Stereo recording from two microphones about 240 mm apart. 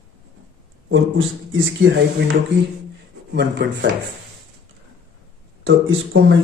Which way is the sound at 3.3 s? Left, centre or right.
Right.